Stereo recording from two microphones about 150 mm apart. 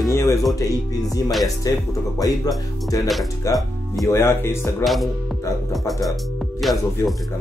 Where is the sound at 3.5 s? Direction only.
20° left (ahead or behind).